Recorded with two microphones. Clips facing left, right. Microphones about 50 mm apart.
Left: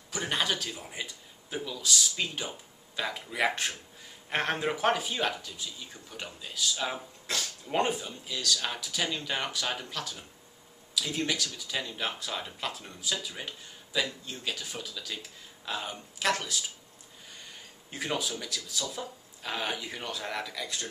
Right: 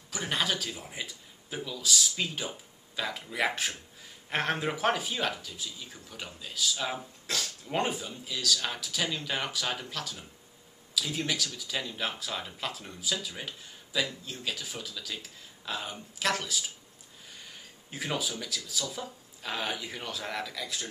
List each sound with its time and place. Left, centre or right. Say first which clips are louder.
0.1 s speech: even; centre